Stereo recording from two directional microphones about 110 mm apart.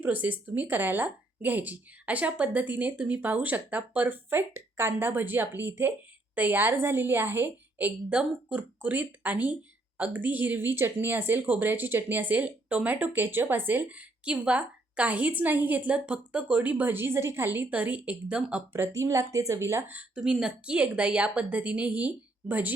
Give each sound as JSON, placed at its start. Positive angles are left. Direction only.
{"t": 0.0, "sound": "a woman's voice", "side_deg": -15}
{"t": 18.7, "sound": "speech", "side_deg": -25}
{"t": 20.0, "sound": "a woman's voice", "side_deg": -5}